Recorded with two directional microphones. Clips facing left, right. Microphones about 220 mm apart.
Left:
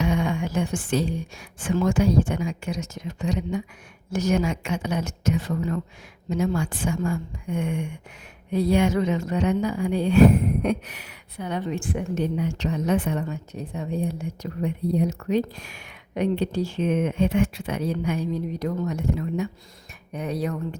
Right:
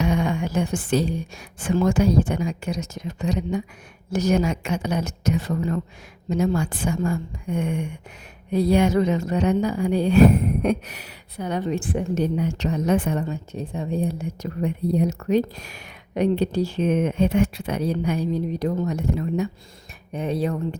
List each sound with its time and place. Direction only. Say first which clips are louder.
0.0 s a sound: right 2 dB; 40° right (ahead or behind)
1.6 s speech: right 2 dB; 40° right (ahead or behind)
13.2 s speech: right 3 dB; 30° right (ahead or behind)